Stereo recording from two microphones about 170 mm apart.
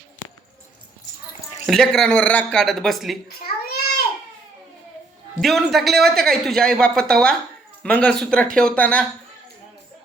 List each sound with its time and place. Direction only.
1.6 s a man's voice: centre (ahead or behind)
3.2 s babbling: 65° left (ahead or behind)
5.4 s a man's voice: centre (ahead or behind)